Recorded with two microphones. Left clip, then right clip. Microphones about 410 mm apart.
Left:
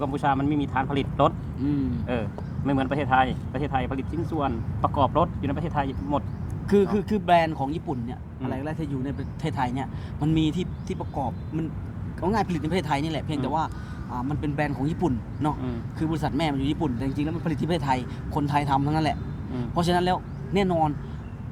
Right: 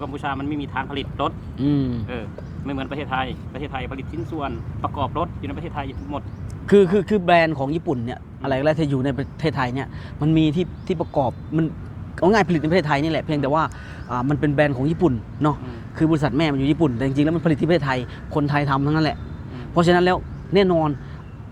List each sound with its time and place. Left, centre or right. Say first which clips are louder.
0.0 s speech: left 3 dB; left
1.6 s speech: right 5 dB; right
2.6 s speech: left 3 dB; left
6.7 s speech: right 7 dB; right
8.4 s speech: right 12 dB; right
9.4 s a man's voice: right 4 dB; right